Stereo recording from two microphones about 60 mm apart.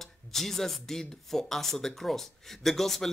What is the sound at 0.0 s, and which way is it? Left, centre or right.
Speech, centre.